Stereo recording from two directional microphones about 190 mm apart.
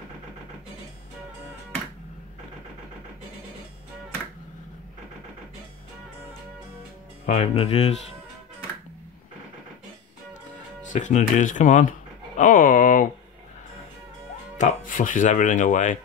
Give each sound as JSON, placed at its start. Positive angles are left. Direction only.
{"t": 7.2, "sound": "speech", "side_deg": 35}
{"t": 10.9, "sound": "speech", "side_deg": 40}
{"t": 14.6, "sound": "speech", "side_deg": 45}